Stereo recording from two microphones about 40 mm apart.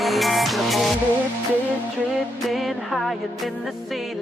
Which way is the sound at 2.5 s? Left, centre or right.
Centre.